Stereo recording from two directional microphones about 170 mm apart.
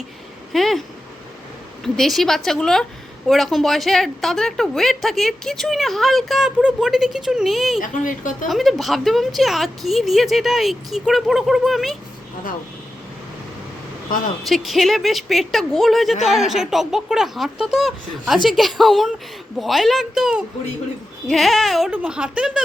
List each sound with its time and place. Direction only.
0.5 s a woman's voice: centre (ahead or behind)
1.8 s a woman's voice: centre (ahead or behind)
7.8 s speech: 50° left (ahead or behind)
8.4 s a woman's voice: centre (ahead or behind)
14.4 s a woman's voice: centre (ahead or behind)